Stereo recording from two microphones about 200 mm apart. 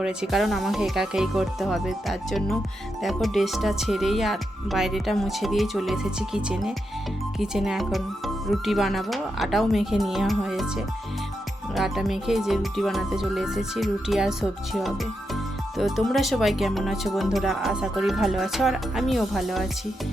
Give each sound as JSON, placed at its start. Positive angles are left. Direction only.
{"t": 0.0, "sound": "speech", "side_deg": 0}